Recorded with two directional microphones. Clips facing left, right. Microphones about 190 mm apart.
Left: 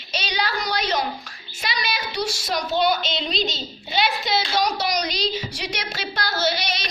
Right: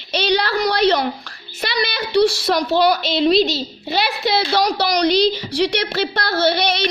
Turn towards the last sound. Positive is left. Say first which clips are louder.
# right 7 dB
turn(degrees=-65)  # may be behind; listen again after turning